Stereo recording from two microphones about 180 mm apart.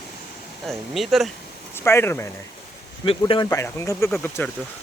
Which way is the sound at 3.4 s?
15° left (ahead or behind).